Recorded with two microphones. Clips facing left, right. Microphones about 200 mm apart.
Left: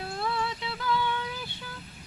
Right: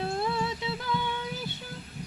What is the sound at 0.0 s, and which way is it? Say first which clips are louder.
Music: right 2 dB; 25° right (ahead or behind).